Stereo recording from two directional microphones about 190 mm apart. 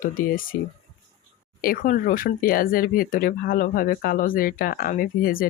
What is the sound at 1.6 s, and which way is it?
Speech, 50° left (ahead or behind).